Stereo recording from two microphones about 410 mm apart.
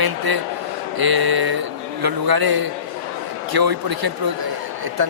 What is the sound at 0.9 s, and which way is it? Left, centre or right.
A man's voice, right.